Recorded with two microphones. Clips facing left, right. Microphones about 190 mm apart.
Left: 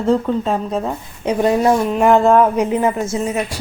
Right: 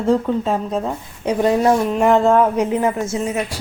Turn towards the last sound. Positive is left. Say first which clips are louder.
# left 1 dB
turn(degrees=35)  # may be behind; listen again after turning